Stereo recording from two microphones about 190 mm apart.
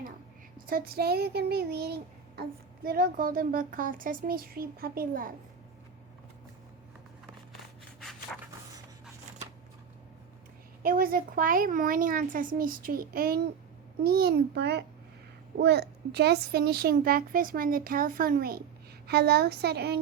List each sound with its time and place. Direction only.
0.7 s a child's voice: 55° right (ahead or behind)
8.3 s writing: 5° left (ahead or behind)
10.8 s a child's voice: 50° right (ahead or behind)